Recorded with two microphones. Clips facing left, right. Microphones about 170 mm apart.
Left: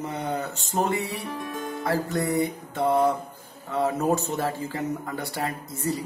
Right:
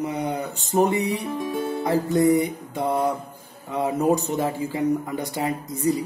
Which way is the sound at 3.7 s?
15° right (ahead or behind).